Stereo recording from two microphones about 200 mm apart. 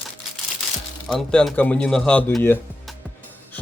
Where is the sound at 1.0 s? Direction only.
Centre (ahead or behind).